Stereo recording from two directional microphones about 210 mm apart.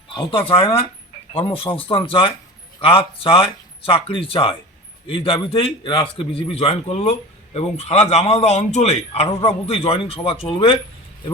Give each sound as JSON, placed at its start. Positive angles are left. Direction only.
{"t": 0.1, "sound": "a man's voice", "side_deg": 25}